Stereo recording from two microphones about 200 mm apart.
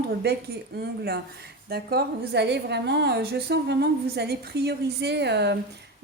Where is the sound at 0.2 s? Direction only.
55° right (ahead or behind).